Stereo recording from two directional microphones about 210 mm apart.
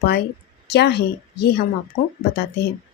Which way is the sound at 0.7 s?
50° left (ahead or behind).